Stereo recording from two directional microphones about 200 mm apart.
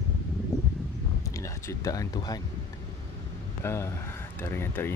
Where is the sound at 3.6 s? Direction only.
10° left (ahead or behind).